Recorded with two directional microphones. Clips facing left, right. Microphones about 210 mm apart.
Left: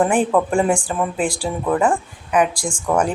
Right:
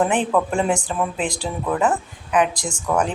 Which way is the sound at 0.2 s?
10° left (ahead or behind).